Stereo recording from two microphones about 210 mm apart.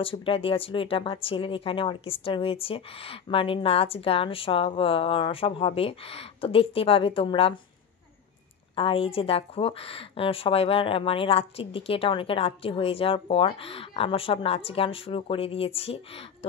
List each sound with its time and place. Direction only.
0.0 s speech: 25° left (ahead or behind)
8.7 s speech: 25° left (ahead or behind)